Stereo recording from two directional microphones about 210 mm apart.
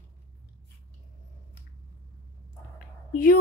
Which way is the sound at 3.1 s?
45° left (ahead or behind).